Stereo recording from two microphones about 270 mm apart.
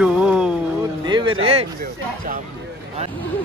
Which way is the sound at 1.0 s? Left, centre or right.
Centre.